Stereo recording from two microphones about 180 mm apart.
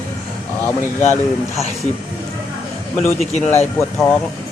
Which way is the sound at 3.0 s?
40° left (ahead or behind).